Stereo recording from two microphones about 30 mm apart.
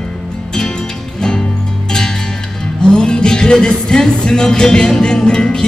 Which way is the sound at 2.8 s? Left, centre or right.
Left.